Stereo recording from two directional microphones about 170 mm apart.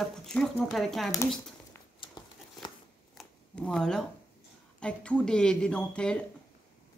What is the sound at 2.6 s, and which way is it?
Scissors, 30° left (ahead or behind).